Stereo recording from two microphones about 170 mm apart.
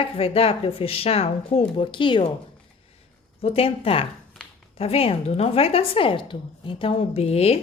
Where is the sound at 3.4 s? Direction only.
35° left (ahead or behind).